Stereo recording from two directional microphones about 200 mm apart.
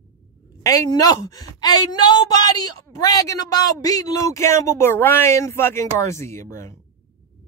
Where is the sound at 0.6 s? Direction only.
20° left (ahead or behind).